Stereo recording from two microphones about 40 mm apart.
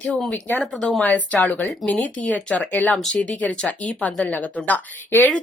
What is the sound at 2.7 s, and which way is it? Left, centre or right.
Speech, left.